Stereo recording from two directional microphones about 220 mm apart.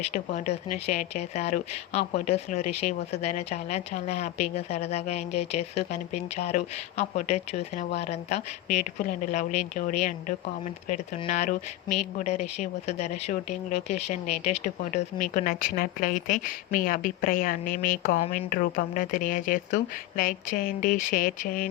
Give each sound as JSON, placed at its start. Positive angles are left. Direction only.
{"t": 0.1, "sound": "a woman's voice", "side_deg": 30}